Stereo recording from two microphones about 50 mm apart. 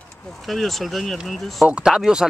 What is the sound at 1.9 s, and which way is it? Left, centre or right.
Speech, centre.